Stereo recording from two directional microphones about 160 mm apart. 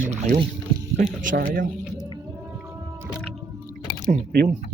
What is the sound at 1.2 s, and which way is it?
Speech, 60° right (ahead or behind).